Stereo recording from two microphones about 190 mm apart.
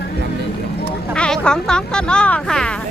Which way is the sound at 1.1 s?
5° left (ahead or behind).